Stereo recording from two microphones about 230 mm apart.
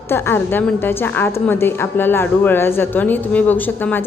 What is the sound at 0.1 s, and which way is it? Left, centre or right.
A woman's voice, centre.